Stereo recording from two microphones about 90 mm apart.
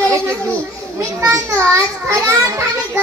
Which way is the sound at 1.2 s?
35° right (ahead or behind).